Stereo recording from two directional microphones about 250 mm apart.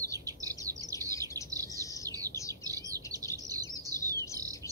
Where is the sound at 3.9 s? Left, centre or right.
Centre.